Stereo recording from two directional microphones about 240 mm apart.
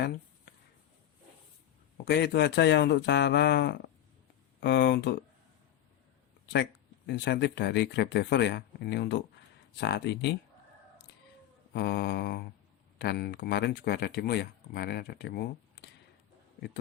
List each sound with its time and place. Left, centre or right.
2.0 s speech: left
7.1 s speech: left
11.7 s speech: left